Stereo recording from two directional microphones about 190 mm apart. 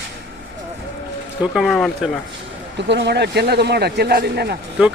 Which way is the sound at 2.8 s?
65° right (ahead or behind).